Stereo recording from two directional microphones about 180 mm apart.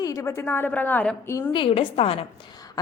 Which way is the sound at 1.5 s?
30° left (ahead or behind).